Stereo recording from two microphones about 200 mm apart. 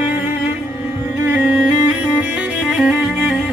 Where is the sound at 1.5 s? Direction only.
5° right (ahead or behind).